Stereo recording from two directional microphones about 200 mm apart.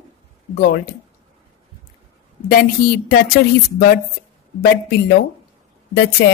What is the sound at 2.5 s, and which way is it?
Speech, 45° left (ahead or behind).